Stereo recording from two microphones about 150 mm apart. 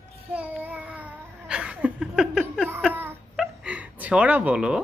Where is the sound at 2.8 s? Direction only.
15° right (ahead or behind).